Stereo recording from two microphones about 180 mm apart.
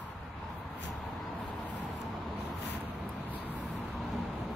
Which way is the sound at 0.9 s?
Centre (ahead or behind).